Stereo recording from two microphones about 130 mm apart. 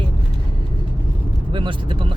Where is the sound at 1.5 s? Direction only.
40° right (ahead or behind).